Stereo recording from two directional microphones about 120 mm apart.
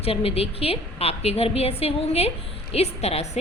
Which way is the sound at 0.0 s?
55° left (ahead or behind).